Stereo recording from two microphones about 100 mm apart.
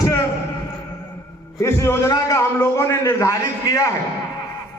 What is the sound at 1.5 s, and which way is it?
A man's voice, 35° left (ahead or behind).